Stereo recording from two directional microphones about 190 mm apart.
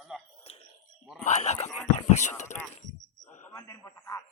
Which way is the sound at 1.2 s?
35° left (ahead or behind).